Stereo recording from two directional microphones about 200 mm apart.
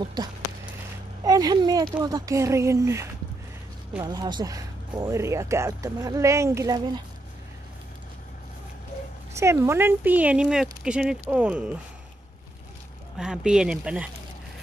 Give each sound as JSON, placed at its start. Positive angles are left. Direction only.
{"t": 1.2, "sound": "speech", "side_deg": -20}
{"t": 9.3, "sound": "speech", "side_deg": -15}
{"t": 13.2, "sound": "speech", "side_deg": -5}